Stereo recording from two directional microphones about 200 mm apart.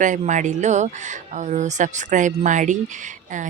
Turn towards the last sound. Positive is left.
turn(degrees=-40)  # may be behind; listen again after turning